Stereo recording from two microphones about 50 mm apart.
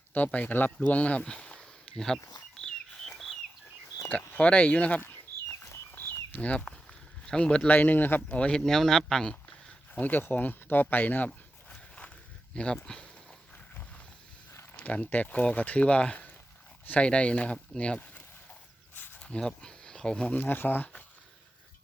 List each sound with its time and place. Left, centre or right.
0.1 s speech: left
1.3 s a sound: centre
4.4 s speech: left
5.5 s livestock: left
5.9 s a sound: left
6.3 s speech: left
7.7 s speech: left
8.3 s speech: left
9.9 s speech: left
12.5 s speech: centre
14.8 s speech: left
19.2 s speech: centre
20.3 s speech: left